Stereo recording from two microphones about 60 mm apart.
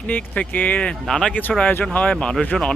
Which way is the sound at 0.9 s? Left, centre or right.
Centre.